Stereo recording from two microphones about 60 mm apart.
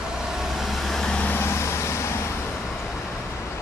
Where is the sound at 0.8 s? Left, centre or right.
Centre.